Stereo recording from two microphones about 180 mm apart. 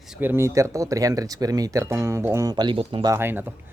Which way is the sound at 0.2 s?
15° right (ahead or behind).